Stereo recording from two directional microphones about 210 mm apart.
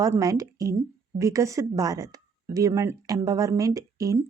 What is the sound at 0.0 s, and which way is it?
Speech, 15° right (ahead or behind).